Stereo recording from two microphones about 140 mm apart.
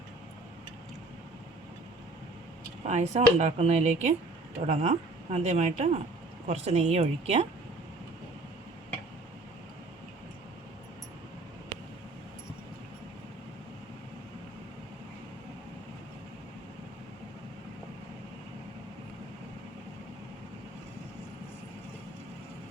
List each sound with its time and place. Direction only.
2.8 s speech: 55° right (ahead or behind)